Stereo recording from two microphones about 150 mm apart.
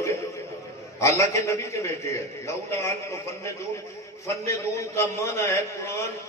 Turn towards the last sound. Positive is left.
turn(degrees=20)  # may be behind; listen again after turning